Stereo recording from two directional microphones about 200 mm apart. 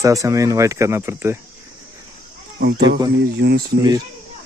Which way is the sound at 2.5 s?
55° right (ahead or behind).